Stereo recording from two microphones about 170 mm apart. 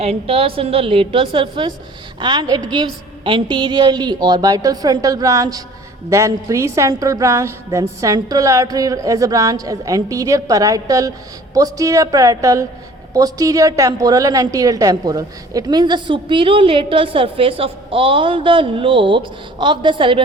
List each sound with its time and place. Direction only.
0.0 s a woman's voice: 35° right (ahead or behind)